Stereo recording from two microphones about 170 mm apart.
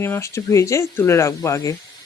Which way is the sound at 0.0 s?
15° left (ahead or behind).